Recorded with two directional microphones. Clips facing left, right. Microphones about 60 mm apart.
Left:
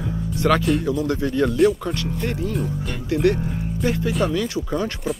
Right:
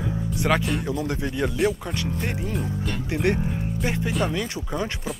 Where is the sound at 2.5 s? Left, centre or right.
Centre.